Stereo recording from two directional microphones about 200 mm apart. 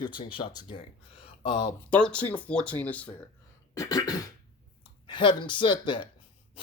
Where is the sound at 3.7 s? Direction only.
20° left (ahead or behind).